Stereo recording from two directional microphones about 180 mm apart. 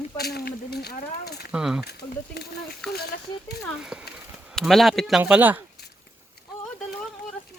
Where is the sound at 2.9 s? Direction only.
60° left (ahead or behind).